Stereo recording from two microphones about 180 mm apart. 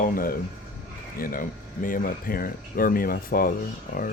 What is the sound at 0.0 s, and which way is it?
Speech, 50° left (ahead or behind).